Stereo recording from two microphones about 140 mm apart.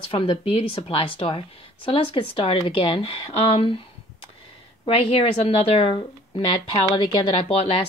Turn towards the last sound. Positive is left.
turn(degrees=40)  # may be behind; listen again after turning